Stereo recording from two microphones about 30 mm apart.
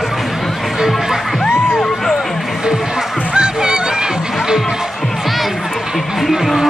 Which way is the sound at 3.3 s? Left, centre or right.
Right.